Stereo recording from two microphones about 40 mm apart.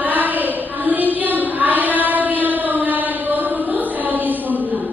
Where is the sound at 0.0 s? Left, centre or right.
Right.